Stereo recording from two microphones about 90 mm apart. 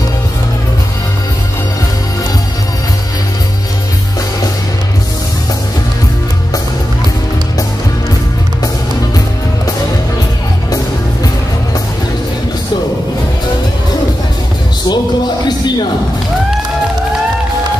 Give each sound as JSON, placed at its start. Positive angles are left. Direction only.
{"t": 14.9, "sound": "music", "side_deg": 50}